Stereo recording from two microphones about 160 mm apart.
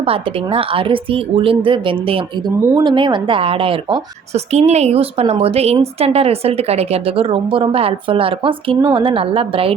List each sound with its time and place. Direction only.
0.0 s speech: 35° right (ahead or behind)